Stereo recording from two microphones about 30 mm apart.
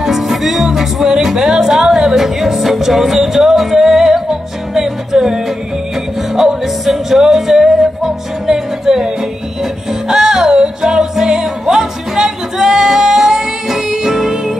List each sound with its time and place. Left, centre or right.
0.0 s music: centre
10.0 s music: centre